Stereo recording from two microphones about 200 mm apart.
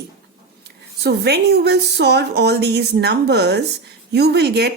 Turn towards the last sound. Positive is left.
turn(degrees=-55)  # may be behind; listen again after turning